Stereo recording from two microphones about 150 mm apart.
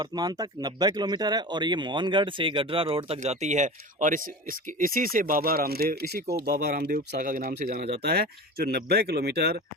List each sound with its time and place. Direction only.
0.0 s speech: 25° right (ahead or behind)
3.2 s speech: 50° right (ahead or behind); by 7.9 s 75° right (ahead or behind)
8.0 s speech: 90° right